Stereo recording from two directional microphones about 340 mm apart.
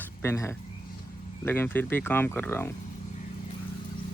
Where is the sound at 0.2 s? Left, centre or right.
Centre.